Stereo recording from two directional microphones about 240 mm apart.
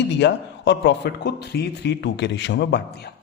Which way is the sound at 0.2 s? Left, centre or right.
Left.